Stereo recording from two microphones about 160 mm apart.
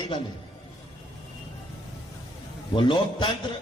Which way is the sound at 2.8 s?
30° left (ahead or behind).